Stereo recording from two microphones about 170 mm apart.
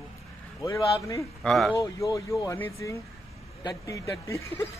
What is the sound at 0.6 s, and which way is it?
Speech, 20° left (ahead or behind).